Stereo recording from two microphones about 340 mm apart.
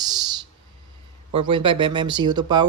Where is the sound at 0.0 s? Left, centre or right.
Centre.